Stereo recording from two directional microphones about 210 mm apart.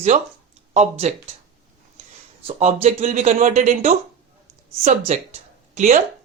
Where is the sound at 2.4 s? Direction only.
30° right (ahead or behind).